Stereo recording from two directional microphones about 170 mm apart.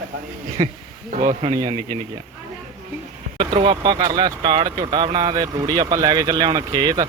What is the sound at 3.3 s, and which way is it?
Speech, 30° right (ahead or behind).